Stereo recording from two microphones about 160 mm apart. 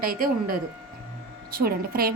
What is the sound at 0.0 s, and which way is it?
A woman's voice, 65° right (ahead or behind).